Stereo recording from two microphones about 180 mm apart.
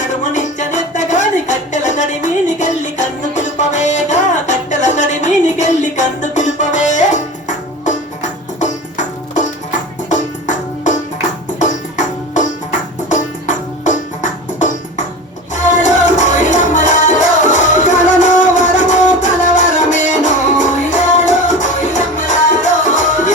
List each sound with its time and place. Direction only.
0.3 s music: 45° left (ahead or behind)